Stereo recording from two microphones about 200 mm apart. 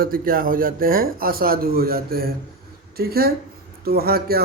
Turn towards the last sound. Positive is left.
turn(degrees=-50)  # may be behind; listen again after turning